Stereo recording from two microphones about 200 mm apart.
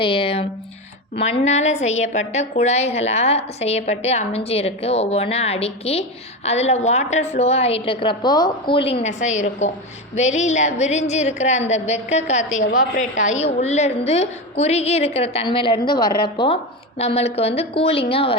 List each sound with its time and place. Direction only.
0.0 s a woman's voice: 25° left (ahead or behind)